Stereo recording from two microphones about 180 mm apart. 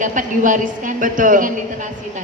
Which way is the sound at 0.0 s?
45° right (ahead or behind).